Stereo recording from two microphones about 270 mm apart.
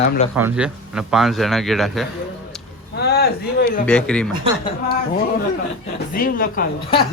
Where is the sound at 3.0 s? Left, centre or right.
Left.